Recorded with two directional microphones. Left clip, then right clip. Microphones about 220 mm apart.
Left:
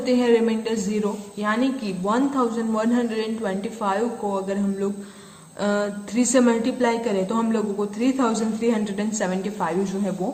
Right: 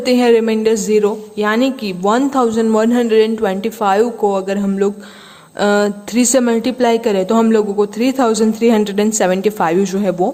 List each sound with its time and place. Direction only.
0.0 s a woman's voice: 50° right (ahead or behind)